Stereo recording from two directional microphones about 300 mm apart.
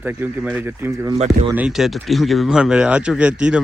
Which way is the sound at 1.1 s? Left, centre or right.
Centre.